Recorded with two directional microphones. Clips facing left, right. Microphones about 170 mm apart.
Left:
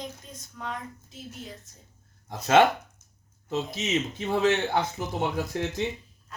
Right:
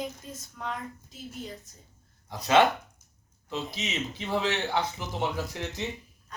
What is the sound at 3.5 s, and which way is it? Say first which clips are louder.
Speech: left 5 dB; 45° left (ahead or behind).